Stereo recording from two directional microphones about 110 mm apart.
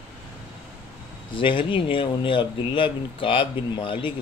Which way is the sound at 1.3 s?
50° left (ahead or behind).